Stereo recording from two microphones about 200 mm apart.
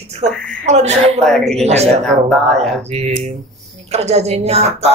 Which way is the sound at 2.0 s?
Centre (ahead or behind).